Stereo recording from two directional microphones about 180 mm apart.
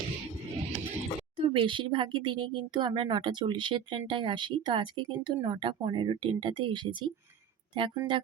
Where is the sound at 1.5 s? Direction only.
25° right (ahead or behind).